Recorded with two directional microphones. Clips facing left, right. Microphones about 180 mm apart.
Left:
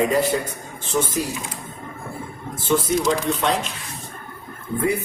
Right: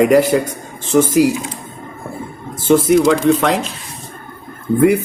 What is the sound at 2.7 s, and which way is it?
Speech, 85° right.